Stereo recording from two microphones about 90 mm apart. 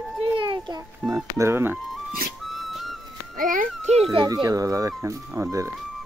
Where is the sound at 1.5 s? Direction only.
25° right (ahead or behind).